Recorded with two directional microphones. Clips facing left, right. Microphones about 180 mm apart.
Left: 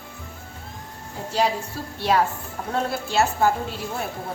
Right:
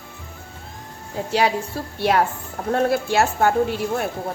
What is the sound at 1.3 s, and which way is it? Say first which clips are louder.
A woman's voice: right 2 dB; 70° right (ahead or behind).